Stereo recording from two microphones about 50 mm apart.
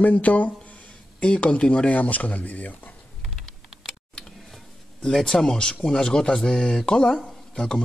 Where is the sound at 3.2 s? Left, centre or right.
Centre.